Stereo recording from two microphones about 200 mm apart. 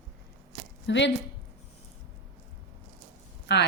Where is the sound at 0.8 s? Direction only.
65° left (ahead or behind).